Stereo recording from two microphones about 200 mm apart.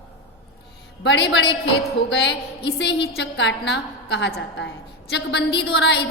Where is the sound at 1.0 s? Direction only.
65° left (ahead or behind).